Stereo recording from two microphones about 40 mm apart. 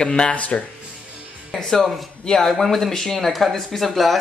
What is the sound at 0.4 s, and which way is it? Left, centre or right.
Speech, left.